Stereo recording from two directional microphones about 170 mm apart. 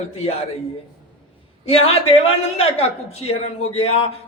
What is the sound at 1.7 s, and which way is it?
A man's voice, 35° left (ahead or behind).